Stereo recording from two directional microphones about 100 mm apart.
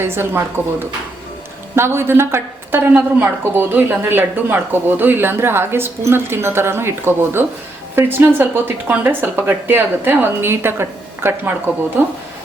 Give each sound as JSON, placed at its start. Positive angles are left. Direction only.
{"t": 0.0, "sound": "a woman's voice", "side_deg": -25}